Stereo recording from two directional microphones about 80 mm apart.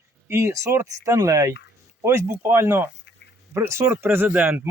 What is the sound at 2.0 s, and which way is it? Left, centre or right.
Speech, right.